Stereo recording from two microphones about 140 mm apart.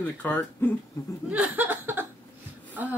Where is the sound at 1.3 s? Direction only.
10° right (ahead or behind).